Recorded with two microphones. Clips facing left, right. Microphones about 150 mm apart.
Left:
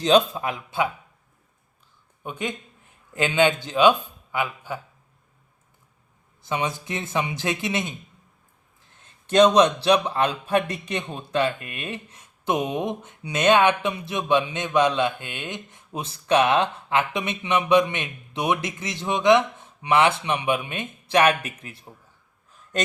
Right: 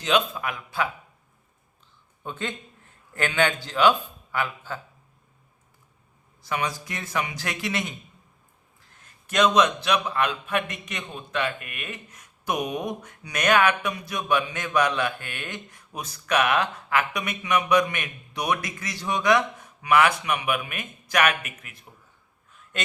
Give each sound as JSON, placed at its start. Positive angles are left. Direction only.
{"t": 0.0, "sound": "a man's voice", "side_deg": 30}
{"t": 2.2, "sound": "a man's voice", "side_deg": 15}
{"t": 6.4, "sound": "a man's voice", "side_deg": 20}
{"t": 9.0, "sound": "a man's voice", "side_deg": 30}